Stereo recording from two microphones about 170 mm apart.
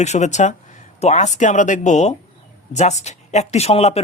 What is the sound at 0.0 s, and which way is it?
A man's voice, 45° left (ahead or behind).